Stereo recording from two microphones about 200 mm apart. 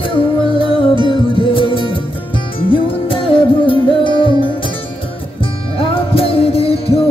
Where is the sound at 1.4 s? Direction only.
25° left (ahead or behind).